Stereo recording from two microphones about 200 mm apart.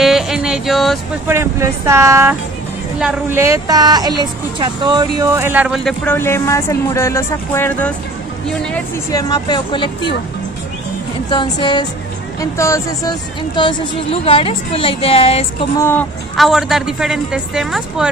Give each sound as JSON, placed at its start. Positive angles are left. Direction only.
{"t": 0.0, "sound": "music", "side_deg": 0}
{"t": 1.2, "sound": "a woman's voice", "side_deg": -15}
{"t": 9.1, "sound": "a woman's voice", "side_deg": 20}
{"t": 11.2, "sound": "a woman's voice", "side_deg": 25}
{"t": 15.8, "sound": "speech", "side_deg": 10}
{"t": 16.3, "sound": "a man's voice", "side_deg": 0}